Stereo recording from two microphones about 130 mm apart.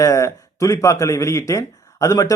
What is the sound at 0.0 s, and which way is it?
Speech, 25° left (ahead or behind).